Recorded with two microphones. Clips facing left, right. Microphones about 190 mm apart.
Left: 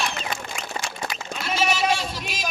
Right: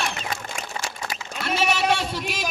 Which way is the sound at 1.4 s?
60° right (ahead or behind).